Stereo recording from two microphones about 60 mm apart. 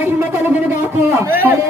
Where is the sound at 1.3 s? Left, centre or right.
Right.